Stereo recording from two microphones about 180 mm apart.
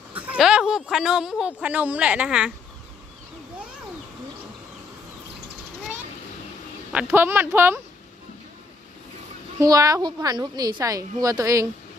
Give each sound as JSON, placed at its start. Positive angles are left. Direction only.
{"t": 0.1, "sound": "a woman's voice", "side_deg": -10}
{"t": 6.9, "sound": "speech", "side_deg": -10}
{"t": 9.6, "sound": "a woman's voice", "side_deg": -20}